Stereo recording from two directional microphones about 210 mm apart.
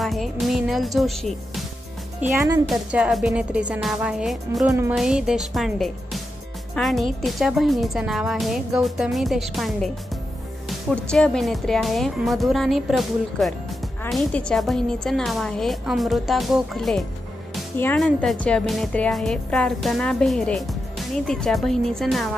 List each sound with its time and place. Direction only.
0.0 s music: centre (ahead or behind)
2.1 s speech: 10° right (ahead or behind)
2.7 s a woman's voice: 5° right (ahead or behind)
4.6 s a woman's voice: 10° right (ahead or behind)